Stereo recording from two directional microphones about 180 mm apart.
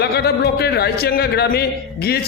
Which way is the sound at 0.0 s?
65° left (ahead or behind).